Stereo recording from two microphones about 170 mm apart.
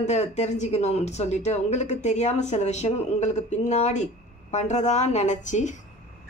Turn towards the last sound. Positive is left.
turn(degrees=45)  # may be behind; listen again after turning